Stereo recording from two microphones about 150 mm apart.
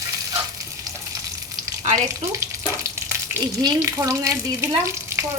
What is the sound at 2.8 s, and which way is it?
Speech, 20° right (ahead or behind).